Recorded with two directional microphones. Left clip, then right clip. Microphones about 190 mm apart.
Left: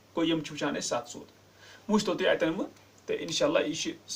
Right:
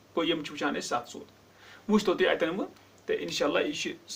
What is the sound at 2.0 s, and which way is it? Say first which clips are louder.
Speech: even; 25° right (ahead or behind).